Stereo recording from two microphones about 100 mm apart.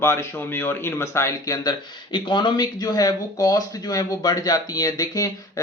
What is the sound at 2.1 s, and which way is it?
Speech, 50° left (ahead or behind).